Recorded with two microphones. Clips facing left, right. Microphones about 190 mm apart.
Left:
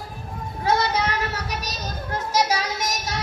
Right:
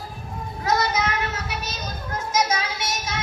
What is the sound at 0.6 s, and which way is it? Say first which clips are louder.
Child singing: left 1 dB; 30° left (ahead or behind).